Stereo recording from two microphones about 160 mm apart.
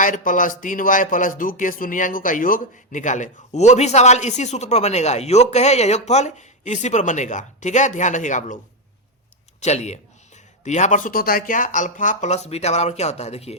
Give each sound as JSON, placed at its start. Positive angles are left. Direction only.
{"t": 0.0, "sound": "speech", "side_deg": 55}
{"t": 9.6, "sound": "speech", "side_deg": 45}